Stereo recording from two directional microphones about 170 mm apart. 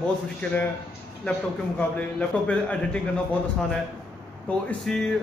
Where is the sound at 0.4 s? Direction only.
5° left (ahead or behind).